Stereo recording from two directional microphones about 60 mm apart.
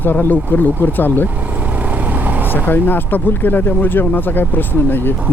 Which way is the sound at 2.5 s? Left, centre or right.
Left.